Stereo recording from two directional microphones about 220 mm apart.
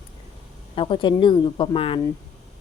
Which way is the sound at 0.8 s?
25° left (ahead or behind).